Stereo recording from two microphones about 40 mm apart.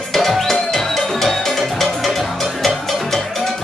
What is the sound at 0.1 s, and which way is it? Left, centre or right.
Music, centre.